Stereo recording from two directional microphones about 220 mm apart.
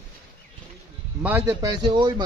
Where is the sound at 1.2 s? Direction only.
10° right (ahead or behind).